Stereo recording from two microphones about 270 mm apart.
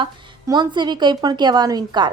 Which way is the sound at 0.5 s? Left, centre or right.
Centre.